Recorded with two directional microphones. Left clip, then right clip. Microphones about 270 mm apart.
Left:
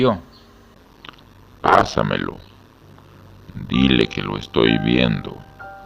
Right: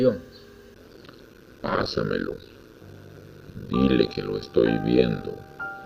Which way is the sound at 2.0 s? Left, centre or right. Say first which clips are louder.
Left 6 dB; left.